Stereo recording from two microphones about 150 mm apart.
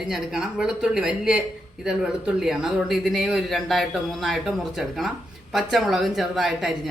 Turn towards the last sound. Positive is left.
turn(degrees=0)  # may be behind; listen again after turning